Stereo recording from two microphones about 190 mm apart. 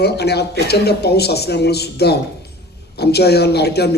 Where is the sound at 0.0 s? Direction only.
60° left (ahead or behind).